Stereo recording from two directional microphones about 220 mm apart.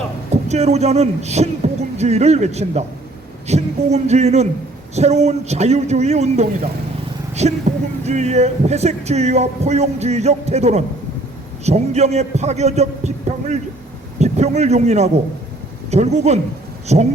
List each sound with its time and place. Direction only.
0.4 s speech: 30° right (ahead or behind)